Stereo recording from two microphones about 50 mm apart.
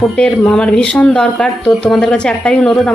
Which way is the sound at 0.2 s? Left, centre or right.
Centre.